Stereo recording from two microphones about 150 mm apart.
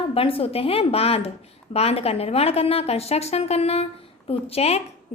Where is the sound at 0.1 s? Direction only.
40° left (ahead or behind).